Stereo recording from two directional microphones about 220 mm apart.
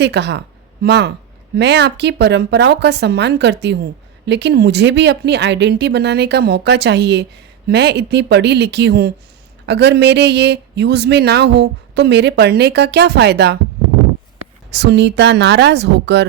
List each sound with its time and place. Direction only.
0.0 s speech: 50° right (ahead or behind)
14.7 s speech: 50° right (ahead or behind)